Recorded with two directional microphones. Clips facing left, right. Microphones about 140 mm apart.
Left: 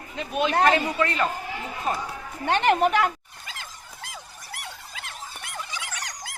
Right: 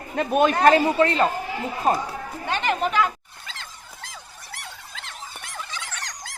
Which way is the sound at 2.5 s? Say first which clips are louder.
Left 4 dB; 60° left (ahead or behind).